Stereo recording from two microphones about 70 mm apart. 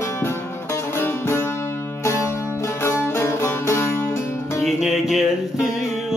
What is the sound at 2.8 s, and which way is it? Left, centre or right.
Music, left.